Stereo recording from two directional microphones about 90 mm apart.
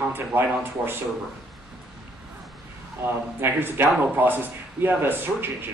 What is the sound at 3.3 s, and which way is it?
Speech, 25° right (ahead or behind).